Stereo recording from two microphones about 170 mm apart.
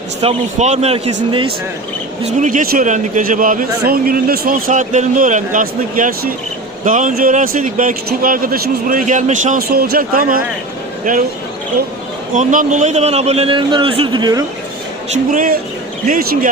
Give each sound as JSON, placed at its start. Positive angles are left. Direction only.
{"t": 0.2, "sound": "a man's voice", "side_deg": -40}
{"t": 2.4, "sound": "a man's voice", "side_deg": -50}
{"t": 6.8, "sound": "a man's voice", "side_deg": -50}
{"t": 9.6, "sound": "speech", "side_deg": -65}
{"t": 12.4, "sound": "a man's voice", "side_deg": -45}
{"t": 15.1, "sound": "a man's voice", "side_deg": -50}